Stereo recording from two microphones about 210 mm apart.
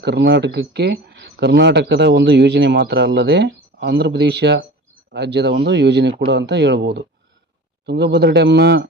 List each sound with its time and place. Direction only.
0.0 s speech: 55° right (ahead or behind)